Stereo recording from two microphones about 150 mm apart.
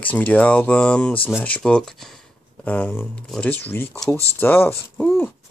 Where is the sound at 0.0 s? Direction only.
10° left (ahead or behind).